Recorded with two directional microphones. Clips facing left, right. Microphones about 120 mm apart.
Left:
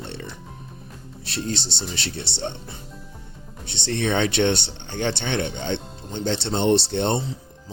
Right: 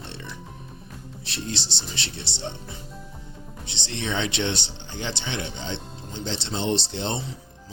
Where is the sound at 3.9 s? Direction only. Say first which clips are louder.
Left 6 dB; 55° left (ahead or behind).